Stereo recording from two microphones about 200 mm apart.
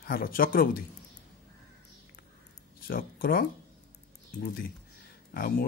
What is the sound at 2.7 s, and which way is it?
Speech, 45° left (ahead or behind).